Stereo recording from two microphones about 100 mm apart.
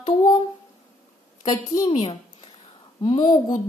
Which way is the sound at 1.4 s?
45° left (ahead or behind).